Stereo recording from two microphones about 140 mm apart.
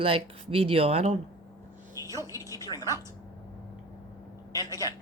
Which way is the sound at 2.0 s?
25° right (ahead or behind).